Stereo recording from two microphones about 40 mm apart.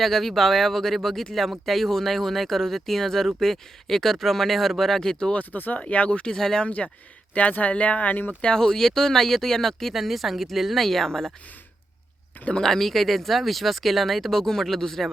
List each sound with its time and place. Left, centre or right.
0.0 s speech: centre
5.5 s speech: left
5.8 s speech: left
6.2 s speech: centre
6.7 s speech: left
8.5 s speech: centre
9.9 s speech: centre
12.6 s speech: centre